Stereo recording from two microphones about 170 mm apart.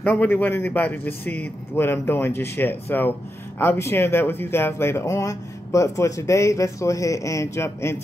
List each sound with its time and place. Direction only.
0.0 s a man's voice: 10° left (ahead or behind)